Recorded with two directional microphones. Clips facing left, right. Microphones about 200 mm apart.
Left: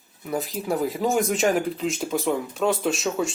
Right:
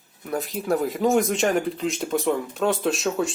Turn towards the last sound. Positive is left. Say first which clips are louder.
# right 1 dB
turn(degrees=0)  # may be behind; listen again after turning